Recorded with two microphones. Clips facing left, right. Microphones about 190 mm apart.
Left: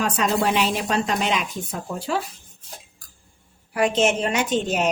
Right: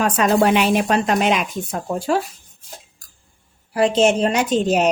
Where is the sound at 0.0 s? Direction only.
55° right (ahead or behind).